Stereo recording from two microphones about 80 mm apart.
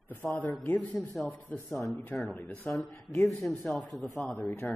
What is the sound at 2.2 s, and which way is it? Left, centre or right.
Speech, left.